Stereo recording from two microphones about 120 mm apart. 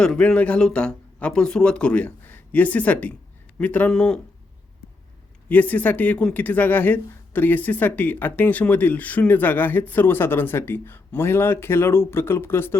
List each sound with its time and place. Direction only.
0.0 s speech: 5° left (ahead or behind)
5.5 s speech: 15° left (ahead or behind)